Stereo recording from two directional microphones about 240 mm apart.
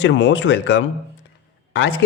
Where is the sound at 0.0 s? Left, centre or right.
Left.